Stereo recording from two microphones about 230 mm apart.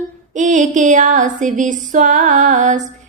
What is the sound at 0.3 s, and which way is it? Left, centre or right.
A woman's voice, right.